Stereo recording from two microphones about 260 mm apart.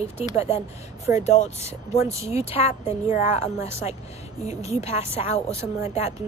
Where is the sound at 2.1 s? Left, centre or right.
Centre.